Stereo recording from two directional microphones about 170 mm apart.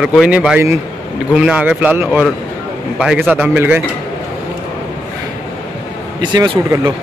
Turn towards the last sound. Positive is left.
turn(degrees=-25)  # may be behind; listen again after turning